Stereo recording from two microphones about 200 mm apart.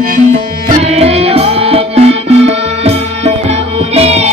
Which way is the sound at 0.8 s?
30° right (ahead or behind).